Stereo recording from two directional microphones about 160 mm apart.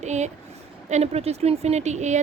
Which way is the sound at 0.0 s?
45° right (ahead or behind).